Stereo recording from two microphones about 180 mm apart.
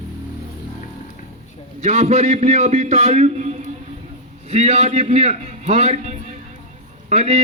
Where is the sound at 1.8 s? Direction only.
35° right (ahead or behind).